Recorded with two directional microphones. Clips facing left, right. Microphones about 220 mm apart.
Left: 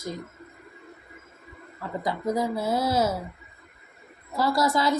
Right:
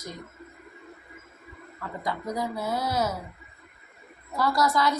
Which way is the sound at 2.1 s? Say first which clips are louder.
Left 4 dB; 25° left (ahead or behind).